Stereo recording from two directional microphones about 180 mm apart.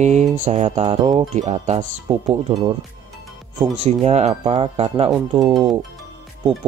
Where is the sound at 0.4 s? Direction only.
35° right (ahead or behind).